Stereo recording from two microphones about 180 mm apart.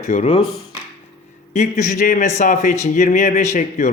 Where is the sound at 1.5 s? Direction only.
40° left (ahead or behind).